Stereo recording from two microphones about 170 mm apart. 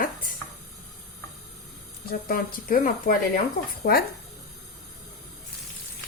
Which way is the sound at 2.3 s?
55° left (ahead or behind).